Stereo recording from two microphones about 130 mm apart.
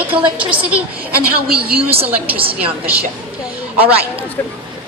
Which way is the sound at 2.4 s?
45° right (ahead or behind).